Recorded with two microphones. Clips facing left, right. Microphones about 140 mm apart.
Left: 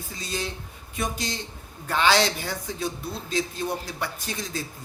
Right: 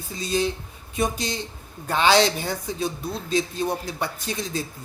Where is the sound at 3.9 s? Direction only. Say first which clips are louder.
Right 3 dB; 20° right (ahead or behind).